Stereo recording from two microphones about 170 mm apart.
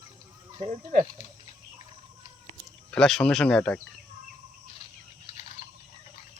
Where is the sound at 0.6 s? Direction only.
45° right (ahead or behind).